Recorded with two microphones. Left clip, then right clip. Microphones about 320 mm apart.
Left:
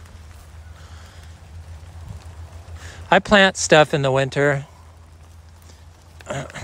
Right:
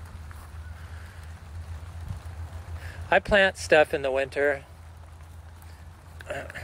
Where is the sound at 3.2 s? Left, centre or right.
Left.